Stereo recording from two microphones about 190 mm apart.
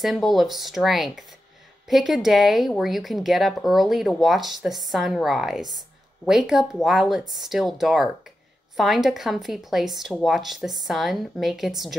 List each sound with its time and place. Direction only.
0.0 s speech: centre (ahead or behind)